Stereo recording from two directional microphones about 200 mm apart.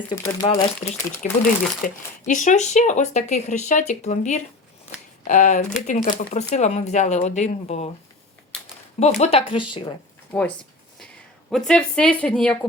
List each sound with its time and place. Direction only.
0.1 s speech: 20° left (ahead or behind)
1.2 s speech: 40° left (ahead or behind)
9.0 s speech: 35° left (ahead or behind)
10.3 s a sound: 5° left (ahead or behind)
11.5 s speech: 5° left (ahead or behind)